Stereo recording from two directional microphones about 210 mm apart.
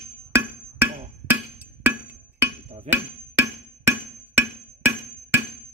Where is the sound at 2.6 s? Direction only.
30° right (ahead or behind).